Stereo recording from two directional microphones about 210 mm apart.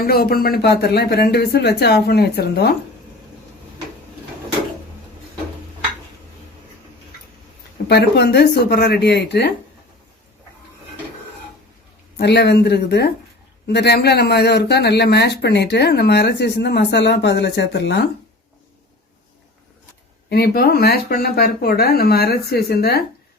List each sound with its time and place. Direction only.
0.0 s speech: 45° left (ahead or behind)
7.9 s speech: 50° left (ahead or behind)
12.1 s speech: 50° left (ahead or behind)
20.3 s speech: 50° left (ahead or behind)